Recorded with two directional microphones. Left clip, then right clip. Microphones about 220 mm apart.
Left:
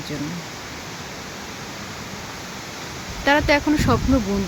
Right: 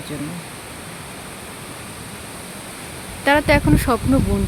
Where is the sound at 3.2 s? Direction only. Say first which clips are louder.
Right 2 dB; 5° right (ahead or behind).